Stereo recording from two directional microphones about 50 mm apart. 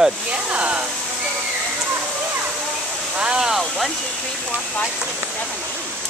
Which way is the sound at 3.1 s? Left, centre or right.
Centre.